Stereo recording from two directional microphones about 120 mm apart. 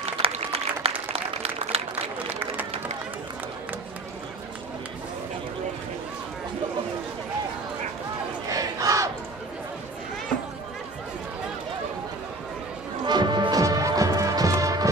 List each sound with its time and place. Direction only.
0.2 s applause: 55° right (ahead or behind)
8.5 s battle cry: 30° right (ahead or behind)
13.0 s music: 40° right (ahead or behind)